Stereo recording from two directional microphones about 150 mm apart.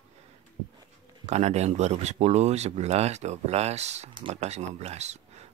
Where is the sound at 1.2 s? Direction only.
45° right (ahead or behind).